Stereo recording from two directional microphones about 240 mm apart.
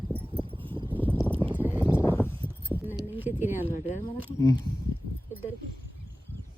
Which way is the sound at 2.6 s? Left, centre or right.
Centre.